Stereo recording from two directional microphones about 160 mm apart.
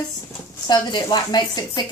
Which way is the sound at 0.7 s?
30° left (ahead or behind).